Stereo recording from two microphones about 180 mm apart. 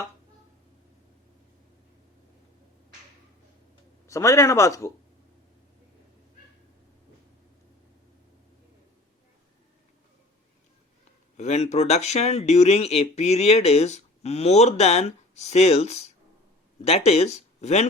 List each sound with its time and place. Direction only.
4.0 s speech: 15° left (ahead or behind)
11.3 s speech: 35° left (ahead or behind)